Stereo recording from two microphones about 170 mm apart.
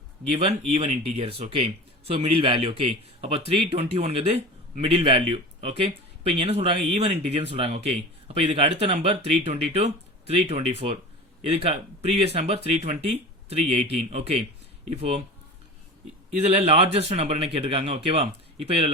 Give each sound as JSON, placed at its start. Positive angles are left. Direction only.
{"t": 0.7, "sound": "speech", "side_deg": -40}
{"t": 16.4, "sound": "speech", "side_deg": -40}